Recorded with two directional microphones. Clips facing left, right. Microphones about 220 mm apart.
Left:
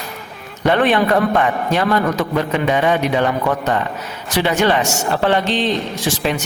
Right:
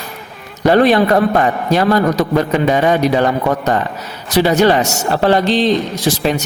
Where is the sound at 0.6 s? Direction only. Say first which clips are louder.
Right 4 dB; 35° right (ahead or behind).